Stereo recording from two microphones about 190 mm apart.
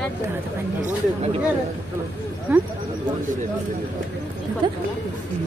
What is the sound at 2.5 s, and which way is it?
Speech, 10° right (ahead or behind).